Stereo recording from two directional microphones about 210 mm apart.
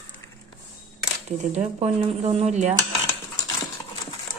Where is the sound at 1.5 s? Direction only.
30° right (ahead or behind).